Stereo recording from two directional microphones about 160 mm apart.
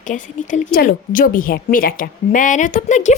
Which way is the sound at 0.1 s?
50° left (ahead or behind).